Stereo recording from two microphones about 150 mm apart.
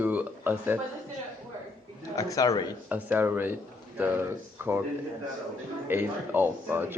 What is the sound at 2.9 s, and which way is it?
A man's voice, 10° right (ahead or behind).